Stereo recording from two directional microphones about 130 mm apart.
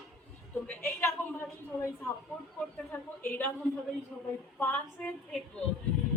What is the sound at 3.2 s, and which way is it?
Speech, 15° left (ahead or behind).